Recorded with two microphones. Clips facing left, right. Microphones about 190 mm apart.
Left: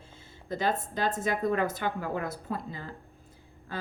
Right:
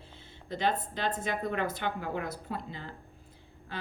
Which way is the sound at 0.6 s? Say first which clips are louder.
Left 1 dB; 45° left (ahead or behind).